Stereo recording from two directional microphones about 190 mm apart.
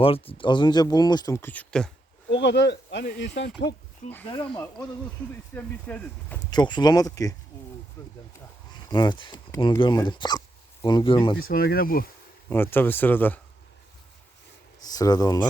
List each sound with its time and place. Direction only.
0.0 s speech: 30° left (ahead or behind); by 1.9 s 5° left (ahead or behind)
2.3 s speech: 70° left (ahead or behind)
4.3 s speech: 25° left (ahead or behind)
5.3 s speech: 10° left (ahead or behind)
6.5 s speech: 20° left (ahead or behind)
11.3 s speech: 50° left (ahead or behind)
12.5 s speech: 10° left (ahead or behind)
14.9 s speech: 20° left (ahead or behind)